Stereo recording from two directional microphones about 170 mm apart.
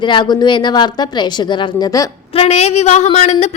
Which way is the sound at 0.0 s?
25° left (ahead or behind).